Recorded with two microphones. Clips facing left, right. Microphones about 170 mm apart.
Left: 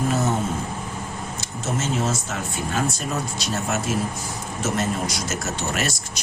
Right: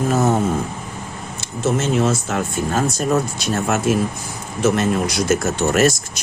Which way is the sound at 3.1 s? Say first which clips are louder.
Right 8 dB; 55° right (ahead or behind).